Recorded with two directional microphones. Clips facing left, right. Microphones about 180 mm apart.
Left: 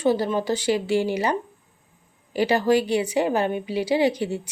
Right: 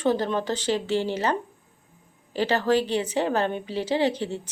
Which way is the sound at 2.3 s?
10° left (ahead or behind).